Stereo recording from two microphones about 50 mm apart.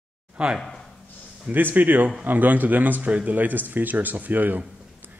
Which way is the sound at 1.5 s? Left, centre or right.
Right.